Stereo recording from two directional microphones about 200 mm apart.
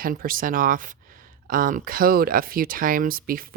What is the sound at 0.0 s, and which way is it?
Speech, 45° right (ahead or behind).